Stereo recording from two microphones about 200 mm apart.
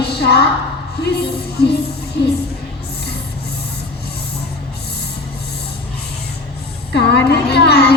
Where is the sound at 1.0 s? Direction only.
55° left (ahead or behind).